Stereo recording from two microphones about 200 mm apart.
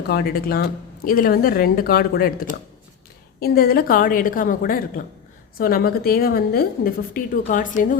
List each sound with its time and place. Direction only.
0.1 s a woman's voice: 50° left (ahead or behind)
3.4 s a woman's voice: 50° left (ahead or behind)